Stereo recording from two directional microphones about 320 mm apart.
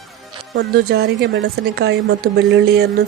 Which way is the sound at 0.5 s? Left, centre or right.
Right.